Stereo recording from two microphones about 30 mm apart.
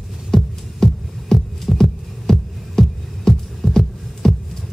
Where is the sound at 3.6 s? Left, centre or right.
Left.